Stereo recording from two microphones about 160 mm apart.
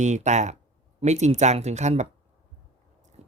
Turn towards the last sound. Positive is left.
turn(degrees=-40)  # may be behind; listen again after turning